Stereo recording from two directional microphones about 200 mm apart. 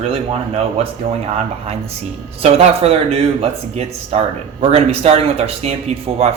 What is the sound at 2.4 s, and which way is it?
Speech, 30° right (ahead or behind).